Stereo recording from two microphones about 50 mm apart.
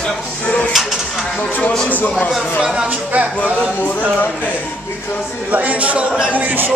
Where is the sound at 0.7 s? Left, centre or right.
Centre.